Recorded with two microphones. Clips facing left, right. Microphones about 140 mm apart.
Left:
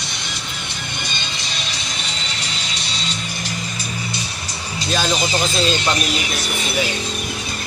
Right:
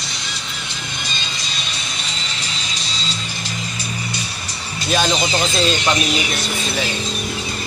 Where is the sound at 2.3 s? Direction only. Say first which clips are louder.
Even; 70° left (ahead or behind).